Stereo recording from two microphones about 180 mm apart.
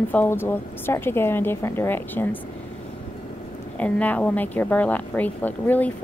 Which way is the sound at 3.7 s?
10° left (ahead or behind).